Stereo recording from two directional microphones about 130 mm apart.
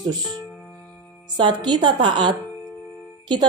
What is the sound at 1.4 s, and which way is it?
A woman's voice, 35° right (ahead or behind).